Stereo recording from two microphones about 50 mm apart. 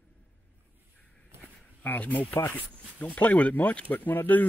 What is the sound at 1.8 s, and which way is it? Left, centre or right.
Speech, left.